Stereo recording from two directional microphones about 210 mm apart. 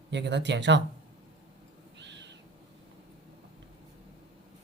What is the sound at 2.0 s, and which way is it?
Owl, 55° right (ahead or behind).